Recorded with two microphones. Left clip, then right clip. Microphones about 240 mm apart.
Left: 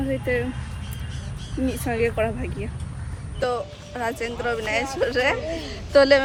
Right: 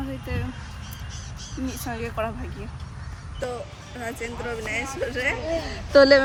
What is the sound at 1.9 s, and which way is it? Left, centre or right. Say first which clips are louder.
Speech: left 7 dB; centre.